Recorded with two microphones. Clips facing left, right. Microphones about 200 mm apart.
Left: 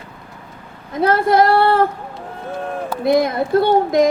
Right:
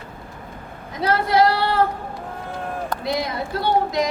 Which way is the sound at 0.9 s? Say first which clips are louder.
Left 5 dB; 50° left (ahead or behind).